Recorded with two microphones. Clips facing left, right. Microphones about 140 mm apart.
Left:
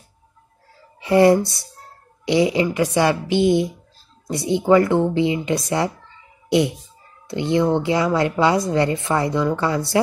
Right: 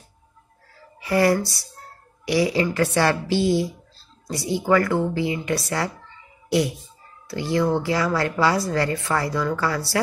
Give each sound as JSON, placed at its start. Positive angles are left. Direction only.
{"t": 1.0, "sound": "a woman's voice", "side_deg": 25}
{"t": 7.2, "sound": "a woman's voice", "side_deg": 20}